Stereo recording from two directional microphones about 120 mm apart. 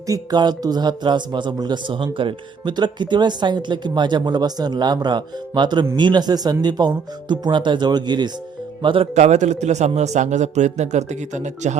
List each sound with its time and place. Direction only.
0.1 s speech: 35° right (ahead or behind)
9.1 s a man's voice: 70° right (ahead or behind)